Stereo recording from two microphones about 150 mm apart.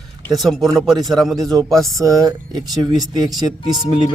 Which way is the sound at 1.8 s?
20° right (ahead or behind).